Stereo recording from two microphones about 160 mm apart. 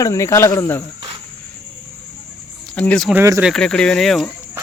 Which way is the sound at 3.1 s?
20° right (ahead or behind).